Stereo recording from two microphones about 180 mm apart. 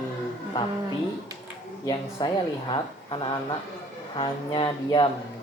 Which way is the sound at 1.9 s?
25° left (ahead or behind).